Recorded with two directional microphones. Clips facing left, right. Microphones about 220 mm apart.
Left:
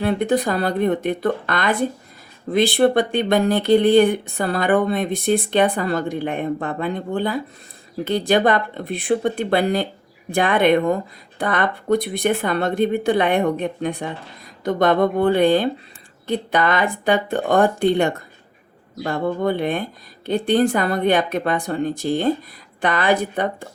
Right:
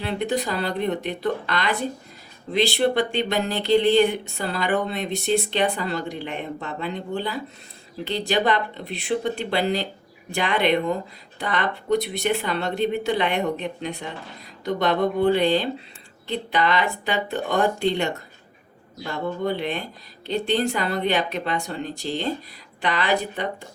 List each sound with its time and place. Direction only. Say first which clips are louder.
0.0 s speech: left 6 dB; 50° left (ahead or behind)